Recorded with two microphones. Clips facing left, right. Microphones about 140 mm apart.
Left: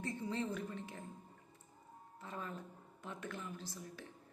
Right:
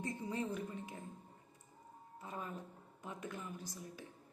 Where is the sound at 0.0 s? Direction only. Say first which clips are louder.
Even; 15° right (ahead or behind).